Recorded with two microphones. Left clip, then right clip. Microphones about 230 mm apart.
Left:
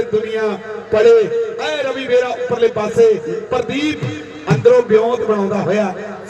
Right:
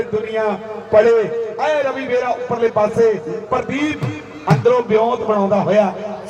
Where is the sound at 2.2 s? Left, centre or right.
Left.